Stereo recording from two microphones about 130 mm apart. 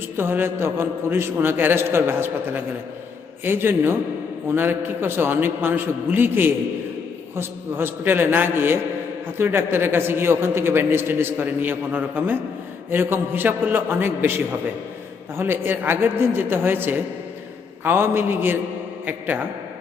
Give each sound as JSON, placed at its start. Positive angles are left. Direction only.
{"t": 0.2, "sound": "a man's voice", "side_deg": -15}